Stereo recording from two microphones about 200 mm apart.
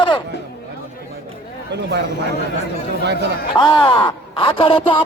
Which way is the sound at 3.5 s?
25° left (ahead or behind).